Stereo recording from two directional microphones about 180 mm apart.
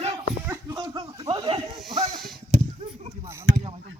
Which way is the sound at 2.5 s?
40° right (ahead or behind).